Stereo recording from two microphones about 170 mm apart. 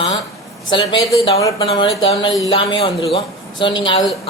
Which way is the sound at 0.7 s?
25° left (ahead or behind).